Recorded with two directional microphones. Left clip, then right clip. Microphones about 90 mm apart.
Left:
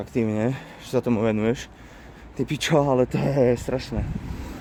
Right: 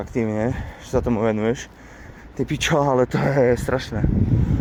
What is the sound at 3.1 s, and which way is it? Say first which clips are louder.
Speech: right 3 dB; 20° left (ahead or behind).